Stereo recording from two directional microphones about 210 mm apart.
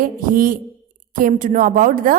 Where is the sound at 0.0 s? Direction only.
40° right (ahead or behind).